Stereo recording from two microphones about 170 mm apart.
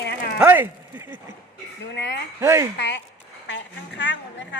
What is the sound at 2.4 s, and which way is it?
Speech, 15° right (ahead or behind).